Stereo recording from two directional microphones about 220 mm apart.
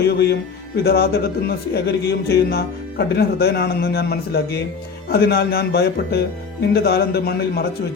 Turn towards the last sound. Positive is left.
turn(degrees=45)  # may be behind; listen again after turning